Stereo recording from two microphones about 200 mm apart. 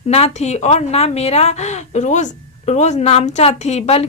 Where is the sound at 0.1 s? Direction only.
35° left (ahead or behind).